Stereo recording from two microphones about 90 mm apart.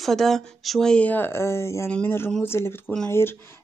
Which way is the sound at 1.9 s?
20° left (ahead or behind).